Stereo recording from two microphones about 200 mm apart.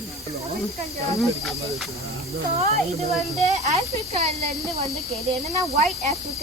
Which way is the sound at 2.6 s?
30° right (ahead or behind).